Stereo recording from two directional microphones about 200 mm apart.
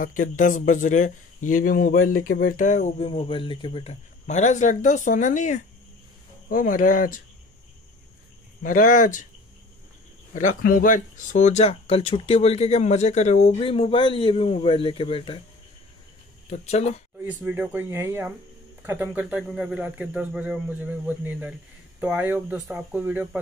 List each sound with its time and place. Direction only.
0.0 s speech: 40° left (ahead or behind)
8.6 s speech: 40° left (ahead or behind)
10.3 s speech: 40° left (ahead or behind); by 15.4 s 25° left (ahead or behind)
16.4 s speech: 35° left (ahead or behind)
17.2 s speech: 10° right (ahead or behind)